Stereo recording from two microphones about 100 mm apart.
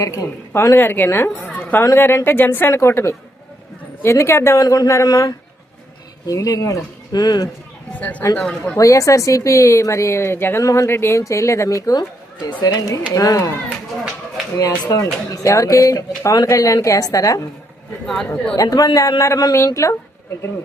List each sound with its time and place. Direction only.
0.0 s a woman's voice: 30° left (ahead or behind)
7.9 s speech: 15° left (ahead or behind)
8.8 s speech: 30° left (ahead or behind)
14.5 s speech: 35° left (ahead or behind)
18.0 s speech: 5° left (ahead or behind)
18.5 s speech: 35° left (ahead or behind)